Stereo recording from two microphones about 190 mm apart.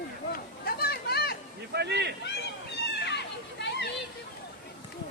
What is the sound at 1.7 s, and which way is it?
Speech, 60° right (ahead or behind).